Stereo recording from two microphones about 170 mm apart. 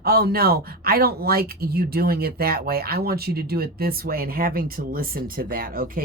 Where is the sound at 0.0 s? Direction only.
65° right (ahead or behind).